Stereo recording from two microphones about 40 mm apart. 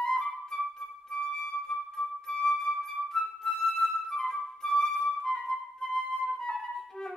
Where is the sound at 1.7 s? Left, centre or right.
Centre.